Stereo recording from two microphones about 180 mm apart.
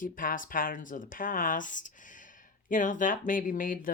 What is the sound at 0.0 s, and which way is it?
Speech, 50° left (ahead or behind).